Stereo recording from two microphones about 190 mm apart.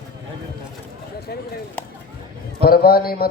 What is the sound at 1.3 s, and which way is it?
Speech, 55° left (ahead or behind).